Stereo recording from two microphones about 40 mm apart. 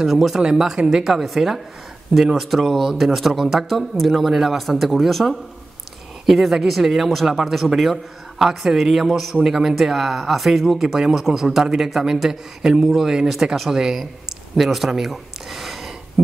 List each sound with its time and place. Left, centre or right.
0.0 s speech: centre
2.1 s speech: centre